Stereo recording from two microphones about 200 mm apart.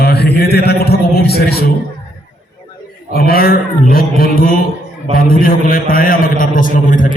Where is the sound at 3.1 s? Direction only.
50° left (ahead or behind).